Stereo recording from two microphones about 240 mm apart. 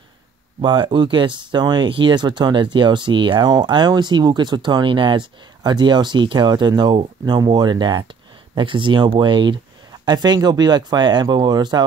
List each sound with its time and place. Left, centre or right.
0.6 s speech: centre